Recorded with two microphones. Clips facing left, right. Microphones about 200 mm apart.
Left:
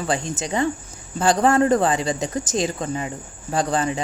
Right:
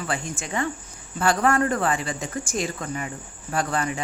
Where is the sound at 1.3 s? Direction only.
25° left (ahead or behind).